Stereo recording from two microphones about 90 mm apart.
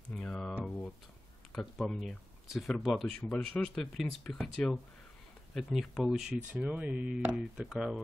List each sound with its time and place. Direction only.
0.1 s a sound: 10° left (ahead or behind)
1.5 s speech: 5° left (ahead or behind)
5.5 s speech: centre (ahead or behind); by 7.3 s 20° right (ahead or behind)
7.3 s speech: 10° right (ahead or behind)